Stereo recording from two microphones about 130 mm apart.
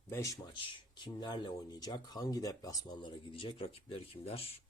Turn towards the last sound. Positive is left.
turn(degrees=50)  # may be behind; listen again after turning